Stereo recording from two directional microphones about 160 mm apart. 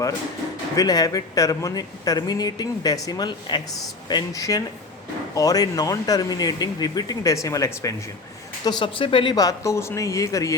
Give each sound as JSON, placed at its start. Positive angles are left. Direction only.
{"t": 0.8, "sound": "speech", "side_deg": 25}
{"t": 8.6, "sound": "speech", "side_deg": 30}